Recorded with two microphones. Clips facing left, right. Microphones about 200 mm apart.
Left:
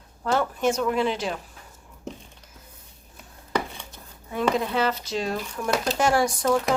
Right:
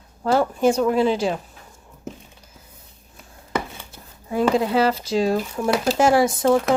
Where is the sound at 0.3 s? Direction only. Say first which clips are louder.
Right 5 dB; 30° right (ahead or behind).